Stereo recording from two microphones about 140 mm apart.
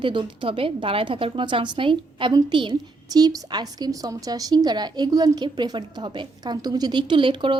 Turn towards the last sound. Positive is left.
turn(degrees=-35)  # may be behind; listen again after turning